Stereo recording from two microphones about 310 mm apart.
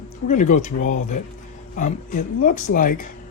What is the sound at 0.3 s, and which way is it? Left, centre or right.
Speech, left.